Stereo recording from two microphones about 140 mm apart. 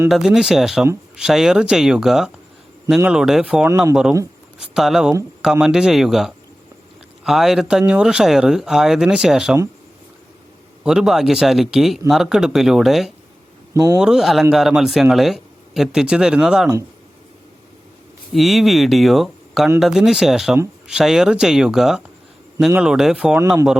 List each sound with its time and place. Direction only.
0.1 s speech: 5° right (ahead or behind)
10.8 s speech: 5° right (ahead or behind)
13.7 s speech: 25° right (ahead or behind)
14.0 s speech: 5° right (ahead or behind)
18.3 s speech: centre (ahead or behind)